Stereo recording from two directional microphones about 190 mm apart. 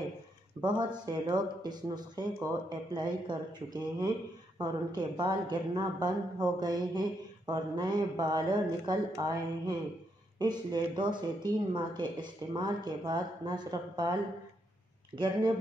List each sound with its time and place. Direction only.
0.6 s speech: 25° right (ahead or behind)
15.1 s speech: 25° right (ahead or behind)